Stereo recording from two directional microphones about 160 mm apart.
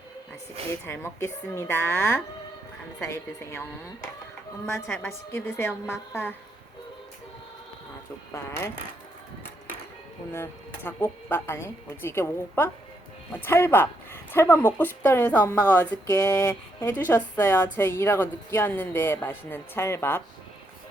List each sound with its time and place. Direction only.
0.7 s speech: 15° left (ahead or behind)
5.0 s speech: 15° left (ahead or behind)
8.3 s speech: 20° left (ahead or behind)
10.3 s speech: 15° left (ahead or behind)
16.8 s speech: 10° left (ahead or behind)